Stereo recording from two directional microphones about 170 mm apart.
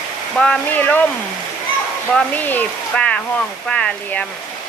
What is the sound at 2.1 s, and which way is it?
Speech, 10° left (ahead or behind).